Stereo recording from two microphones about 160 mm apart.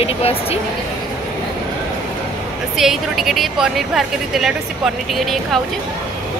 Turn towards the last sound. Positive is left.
turn(degrees=0)  # may be behind; listen again after turning